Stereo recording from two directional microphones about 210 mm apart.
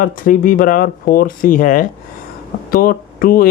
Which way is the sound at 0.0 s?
40° left (ahead or behind).